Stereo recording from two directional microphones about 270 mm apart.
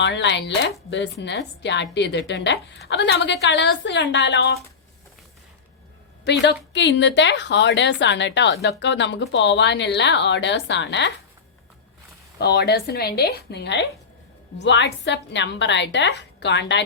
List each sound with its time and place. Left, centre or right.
0.0 s a woman's voice: left
6.2 s a woman's voice: left
12.4 s a woman's voice: left